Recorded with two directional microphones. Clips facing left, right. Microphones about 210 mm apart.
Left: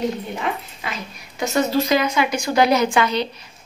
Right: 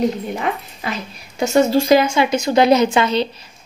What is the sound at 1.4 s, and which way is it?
A woman's voice, 30° right (ahead or behind).